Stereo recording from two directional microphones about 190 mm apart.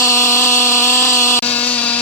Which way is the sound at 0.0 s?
15° left (ahead or behind).